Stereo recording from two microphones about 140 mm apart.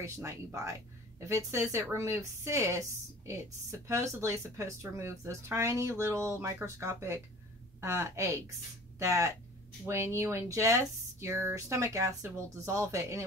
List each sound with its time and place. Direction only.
0.0 s speech: 20° right (ahead or behind)
3.8 s speech: 20° right (ahead or behind)